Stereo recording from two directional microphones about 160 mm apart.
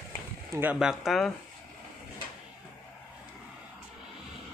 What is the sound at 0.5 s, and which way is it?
Speech, 10° right (ahead or behind).